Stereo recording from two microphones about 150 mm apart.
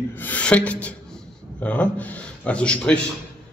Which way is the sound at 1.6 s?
10° left (ahead or behind).